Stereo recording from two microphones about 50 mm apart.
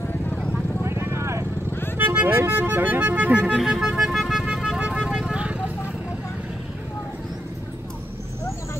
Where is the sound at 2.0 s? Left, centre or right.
Right.